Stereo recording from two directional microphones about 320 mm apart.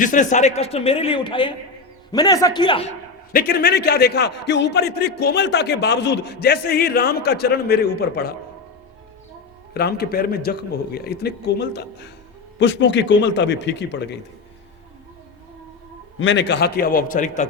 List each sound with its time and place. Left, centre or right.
0.0 s a man's voice: left
3.3 s a man's voice: left
9.7 s a man's voice: left
16.1 s a man's voice: left